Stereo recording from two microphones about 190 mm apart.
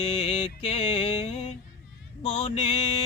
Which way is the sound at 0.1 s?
30° left (ahead or behind).